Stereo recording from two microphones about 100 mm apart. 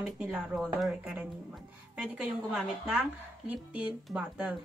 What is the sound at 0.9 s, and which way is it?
A woman's voice, 15° right (ahead or behind).